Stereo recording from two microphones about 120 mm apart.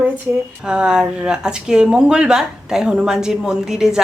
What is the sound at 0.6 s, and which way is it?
Speech, 5° right (ahead or behind).